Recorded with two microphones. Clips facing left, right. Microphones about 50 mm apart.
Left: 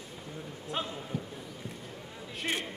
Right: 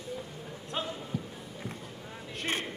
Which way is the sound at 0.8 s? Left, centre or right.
Centre.